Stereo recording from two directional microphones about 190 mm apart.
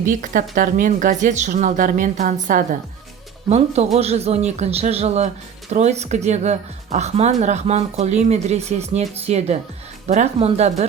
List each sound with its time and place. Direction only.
0.0 s a woman's voice: 45° right (ahead or behind)
3.9 s speech: 35° right (ahead or behind)